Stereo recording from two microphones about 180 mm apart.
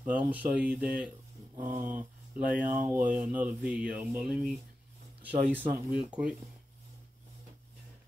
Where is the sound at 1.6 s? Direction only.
50° right (ahead or behind).